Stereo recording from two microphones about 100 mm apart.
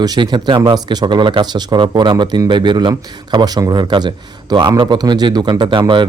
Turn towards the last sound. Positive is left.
turn(degrees=-50)  # may be behind; listen again after turning